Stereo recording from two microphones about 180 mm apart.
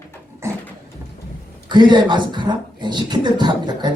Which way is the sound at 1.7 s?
25° right (ahead or behind).